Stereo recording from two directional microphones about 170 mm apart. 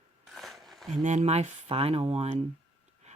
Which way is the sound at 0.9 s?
45° right (ahead or behind).